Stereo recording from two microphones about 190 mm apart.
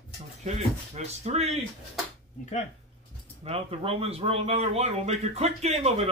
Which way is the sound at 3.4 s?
30° right (ahead or behind).